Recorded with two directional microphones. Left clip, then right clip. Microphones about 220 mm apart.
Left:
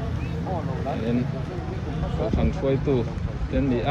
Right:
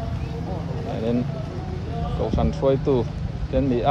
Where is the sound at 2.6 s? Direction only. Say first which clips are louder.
Right 5 dB; 40° right (ahead or behind).